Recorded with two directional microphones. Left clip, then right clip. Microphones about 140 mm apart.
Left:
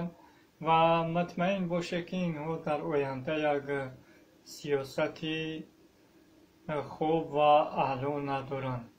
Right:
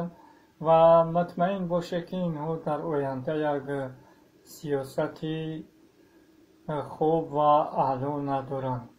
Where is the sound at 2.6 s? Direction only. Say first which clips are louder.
Right 1 dB; 20° right (ahead or behind).